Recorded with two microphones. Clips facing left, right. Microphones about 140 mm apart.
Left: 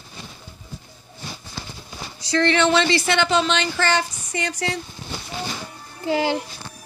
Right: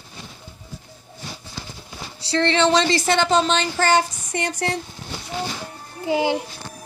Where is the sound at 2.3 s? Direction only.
25° right (ahead or behind); by 4.7 s 50° right (ahead or behind).